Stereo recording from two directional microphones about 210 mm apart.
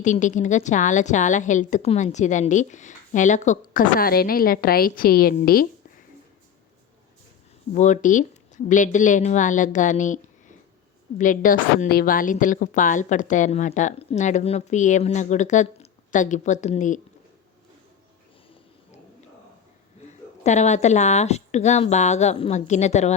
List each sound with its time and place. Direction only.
0.0 s a woman's voice: 35° left (ahead or behind)
7.7 s a woman's voice: 35° left (ahead or behind)
11.2 s a woman's voice: 40° left (ahead or behind)
20.4 s a woman's voice: 35° left (ahead or behind)